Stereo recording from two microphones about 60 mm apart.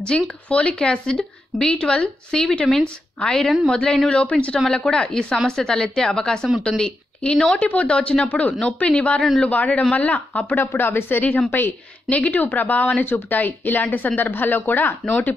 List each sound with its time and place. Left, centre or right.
0.1 s a woman's voice: centre
7.5 s speech: left